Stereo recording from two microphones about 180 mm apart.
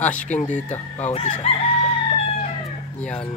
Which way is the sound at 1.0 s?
35° left (ahead or behind).